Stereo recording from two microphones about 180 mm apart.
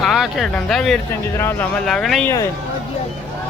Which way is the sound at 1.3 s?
15° left (ahead or behind).